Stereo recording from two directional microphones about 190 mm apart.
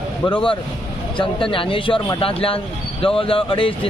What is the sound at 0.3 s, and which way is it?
A man's voice, 25° left (ahead or behind).